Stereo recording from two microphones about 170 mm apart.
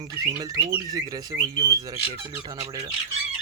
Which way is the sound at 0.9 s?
25° right (ahead or behind).